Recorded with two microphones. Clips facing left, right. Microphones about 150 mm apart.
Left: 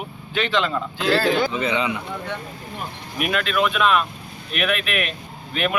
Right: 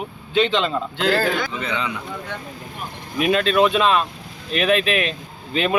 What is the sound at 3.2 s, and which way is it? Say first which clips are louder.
A man's voice: right 5 dB; 30° right (ahead or behind).